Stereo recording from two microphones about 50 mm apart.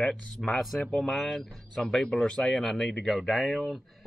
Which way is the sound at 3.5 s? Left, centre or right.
Centre.